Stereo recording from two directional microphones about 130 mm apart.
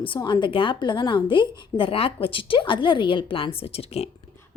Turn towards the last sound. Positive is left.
turn(degrees=50)  # may be behind; listen again after turning